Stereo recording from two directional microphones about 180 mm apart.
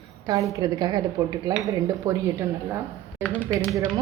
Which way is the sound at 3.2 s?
10° left (ahead or behind).